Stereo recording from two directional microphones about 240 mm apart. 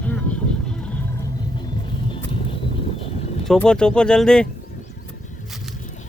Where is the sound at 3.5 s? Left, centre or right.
Centre.